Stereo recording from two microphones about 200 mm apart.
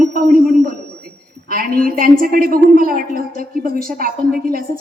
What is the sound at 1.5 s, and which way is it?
A woman's voice, 45° right (ahead or behind).